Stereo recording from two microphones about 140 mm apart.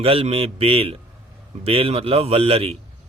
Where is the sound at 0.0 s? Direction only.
45° right (ahead or behind).